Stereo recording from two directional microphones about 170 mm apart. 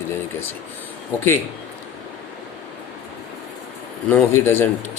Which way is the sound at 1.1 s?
10° left (ahead or behind).